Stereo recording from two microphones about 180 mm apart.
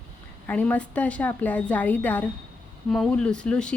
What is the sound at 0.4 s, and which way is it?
Speech, 10° left (ahead or behind).